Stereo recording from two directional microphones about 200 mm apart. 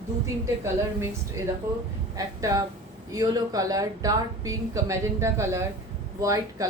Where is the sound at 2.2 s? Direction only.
15° right (ahead or behind).